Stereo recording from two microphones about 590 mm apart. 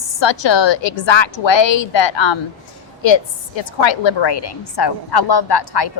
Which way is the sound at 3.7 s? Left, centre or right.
Left.